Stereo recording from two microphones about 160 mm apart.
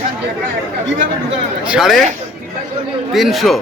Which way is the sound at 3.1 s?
Centre (ahead or behind).